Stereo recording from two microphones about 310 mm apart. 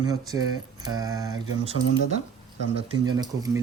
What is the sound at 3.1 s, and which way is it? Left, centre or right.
Speech, centre.